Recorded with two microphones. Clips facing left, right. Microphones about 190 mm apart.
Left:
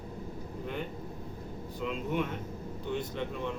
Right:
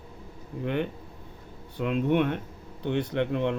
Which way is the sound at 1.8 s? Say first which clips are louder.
Right 8 dB; 70° right (ahead or behind).